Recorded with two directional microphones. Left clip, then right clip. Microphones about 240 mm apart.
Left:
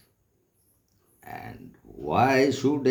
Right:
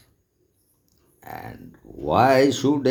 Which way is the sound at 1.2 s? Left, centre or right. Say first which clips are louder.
Right 3 dB; centre.